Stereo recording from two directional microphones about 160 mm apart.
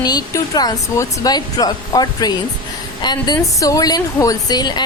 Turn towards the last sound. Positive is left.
turn(degrees=25)  # may be behind; listen again after turning